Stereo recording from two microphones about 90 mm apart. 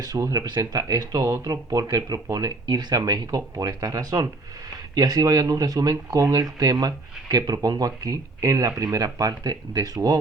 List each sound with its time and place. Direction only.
0.0 s speech: 45° right (ahead or behind)